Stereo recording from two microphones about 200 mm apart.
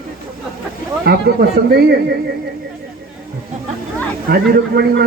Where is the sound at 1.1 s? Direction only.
50° right (ahead or behind).